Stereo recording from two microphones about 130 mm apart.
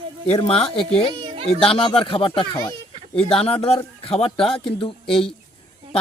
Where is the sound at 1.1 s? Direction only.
40° right (ahead or behind).